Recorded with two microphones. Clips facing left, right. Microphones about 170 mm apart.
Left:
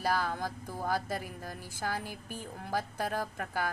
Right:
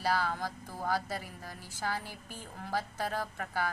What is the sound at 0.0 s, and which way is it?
Speech, 50° left (ahead or behind).